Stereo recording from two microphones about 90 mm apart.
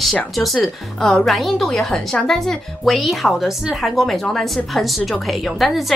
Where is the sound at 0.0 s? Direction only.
Centre (ahead or behind).